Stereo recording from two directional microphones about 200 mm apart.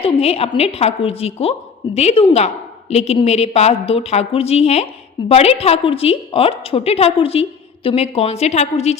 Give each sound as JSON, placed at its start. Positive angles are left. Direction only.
{"t": 0.0, "sound": "a woman's voice", "side_deg": 30}